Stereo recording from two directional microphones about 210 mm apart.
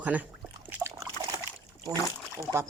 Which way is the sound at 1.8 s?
15° right (ahead or behind).